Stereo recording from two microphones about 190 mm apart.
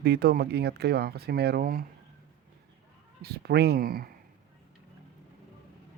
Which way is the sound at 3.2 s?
55° right (ahead or behind).